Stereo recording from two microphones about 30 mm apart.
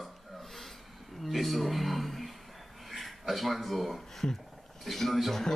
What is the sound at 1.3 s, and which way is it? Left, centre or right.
Speech, centre.